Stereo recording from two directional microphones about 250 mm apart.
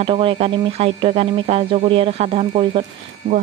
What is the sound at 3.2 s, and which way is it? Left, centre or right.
Speech, right.